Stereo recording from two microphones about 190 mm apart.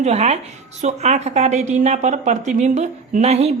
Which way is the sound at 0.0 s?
35° right (ahead or behind).